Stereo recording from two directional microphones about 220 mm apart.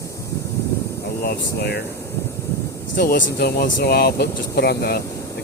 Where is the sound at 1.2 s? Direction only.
45° left (ahead or behind).